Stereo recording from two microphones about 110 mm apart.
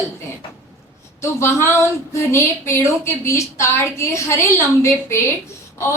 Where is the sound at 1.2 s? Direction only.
25° left (ahead or behind).